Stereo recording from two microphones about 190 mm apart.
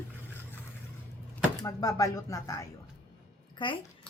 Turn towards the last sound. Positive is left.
turn(degrees=25)  # may be behind; listen again after turning